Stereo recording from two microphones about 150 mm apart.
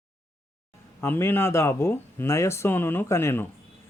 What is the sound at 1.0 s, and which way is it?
A man's voice, 15° left (ahead or behind).